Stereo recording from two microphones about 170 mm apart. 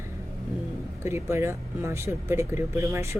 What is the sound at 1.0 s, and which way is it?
Speech, 15° right (ahead or behind).